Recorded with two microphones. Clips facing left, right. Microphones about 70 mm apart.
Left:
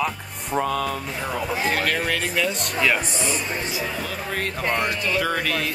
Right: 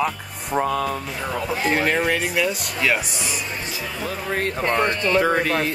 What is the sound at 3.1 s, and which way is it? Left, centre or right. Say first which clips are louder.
Speech: left 2 dB; left.